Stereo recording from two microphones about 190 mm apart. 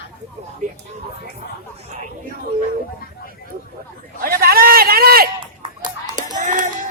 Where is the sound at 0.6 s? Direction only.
40° right (ahead or behind).